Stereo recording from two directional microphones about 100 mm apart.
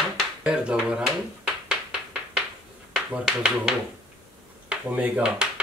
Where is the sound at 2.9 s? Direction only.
5° right (ahead or behind).